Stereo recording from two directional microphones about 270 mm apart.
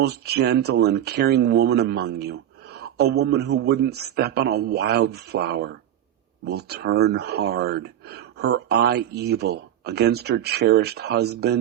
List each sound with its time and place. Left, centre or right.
0.0 s speech: right